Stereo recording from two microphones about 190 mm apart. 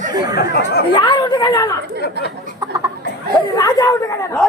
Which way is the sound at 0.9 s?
25° left (ahead or behind).